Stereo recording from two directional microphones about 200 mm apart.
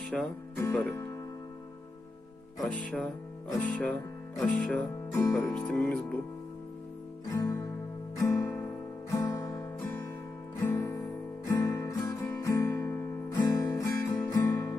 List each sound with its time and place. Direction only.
0.1 s music: 5° left (ahead or behind)
2.6 s music: 5° left (ahead or behind)
7.3 s music: 15° left (ahead or behind)
9.0 s guitar: 15° left (ahead or behind)
10.6 s music: 15° left (ahead or behind)
11.4 s guitar: 15° left (ahead or behind)